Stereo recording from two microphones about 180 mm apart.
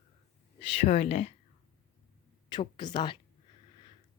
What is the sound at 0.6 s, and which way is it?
Speech, 35° left (ahead or behind).